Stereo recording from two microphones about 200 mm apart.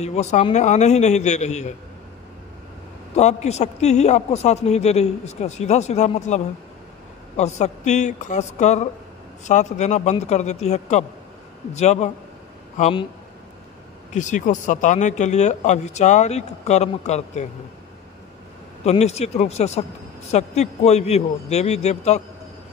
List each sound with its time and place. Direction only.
0.0 s speech: 35° left (ahead or behind)
3.2 s speech: 35° left (ahead or behind)
14.1 s speech: 40° left (ahead or behind)
18.9 s speech: 30° left (ahead or behind)